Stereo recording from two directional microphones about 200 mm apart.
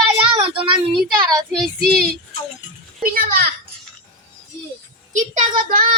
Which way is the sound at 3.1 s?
45° right (ahead or behind).